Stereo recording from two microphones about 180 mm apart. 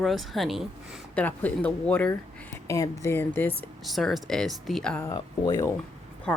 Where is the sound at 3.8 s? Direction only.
Centre (ahead or behind).